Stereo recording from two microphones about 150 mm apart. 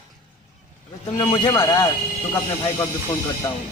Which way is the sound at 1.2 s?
25° left (ahead or behind).